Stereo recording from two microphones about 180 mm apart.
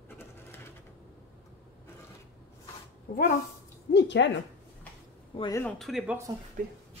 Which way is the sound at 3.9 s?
75° left (ahead or behind).